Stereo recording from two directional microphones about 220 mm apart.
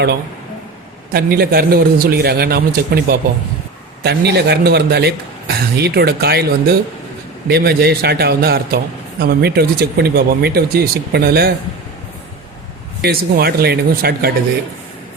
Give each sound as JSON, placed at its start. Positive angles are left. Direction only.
{"t": 1.1, "sound": "a man's voice", "side_deg": -45}
{"t": 13.0, "sound": "a man's voice", "side_deg": -45}